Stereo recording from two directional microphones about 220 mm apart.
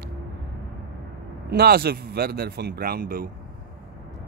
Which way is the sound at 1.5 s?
45° right (ahead or behind).